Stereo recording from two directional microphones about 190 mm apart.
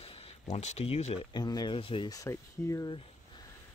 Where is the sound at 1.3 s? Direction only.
20° left (ahead or behind).